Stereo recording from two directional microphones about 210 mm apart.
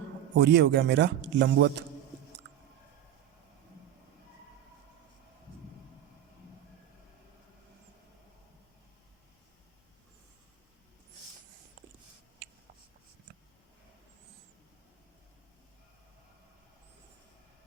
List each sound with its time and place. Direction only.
0.3 s a man's voice: 55° right (ahead or behind)